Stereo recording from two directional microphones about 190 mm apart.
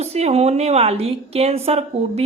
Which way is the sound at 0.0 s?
35° right (ahead or behind).